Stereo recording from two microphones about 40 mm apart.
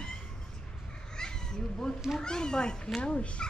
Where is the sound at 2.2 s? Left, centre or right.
Centre.